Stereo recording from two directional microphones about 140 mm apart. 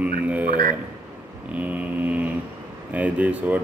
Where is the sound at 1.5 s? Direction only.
10° right (ahead or behind).